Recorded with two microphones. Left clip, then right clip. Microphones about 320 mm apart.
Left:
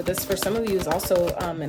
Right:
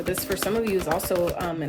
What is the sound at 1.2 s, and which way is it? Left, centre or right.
Speech, centre.